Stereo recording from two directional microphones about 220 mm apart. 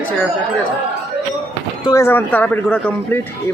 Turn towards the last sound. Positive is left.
turn(degrees=5)  # may be behind; listen again after turning